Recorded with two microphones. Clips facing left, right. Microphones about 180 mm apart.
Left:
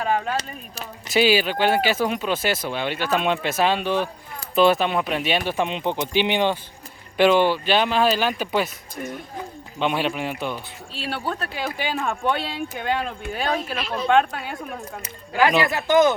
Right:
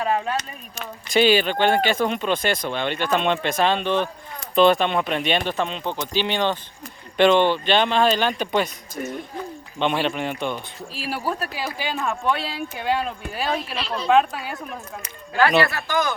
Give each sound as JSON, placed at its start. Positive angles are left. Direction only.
{"t": 0.0, "sound": "speech", "side_deg": 0}
{"t": 9.7, "sound": "speech", "side_deg": 5}
{"t": 13.7, "sound": "a woman's voice", "side_deg": -35}
{"t": 14.1, "sound": "speech", "side_deg": 0}
{"t": 15.3, "sound": "speech", "side_deg": 15}